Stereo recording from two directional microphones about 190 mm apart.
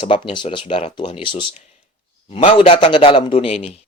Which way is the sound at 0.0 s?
25° left (ahead or behind).